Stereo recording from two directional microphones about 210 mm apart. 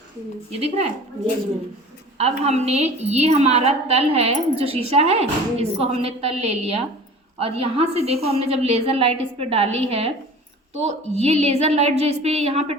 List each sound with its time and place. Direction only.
2.1 s a woman's voice: 30° right (ahead or behind)